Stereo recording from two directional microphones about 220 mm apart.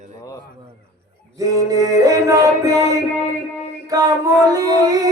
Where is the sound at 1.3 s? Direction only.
15° right (ahead or behind).